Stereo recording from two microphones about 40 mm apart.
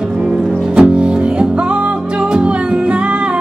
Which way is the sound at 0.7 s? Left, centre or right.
Right.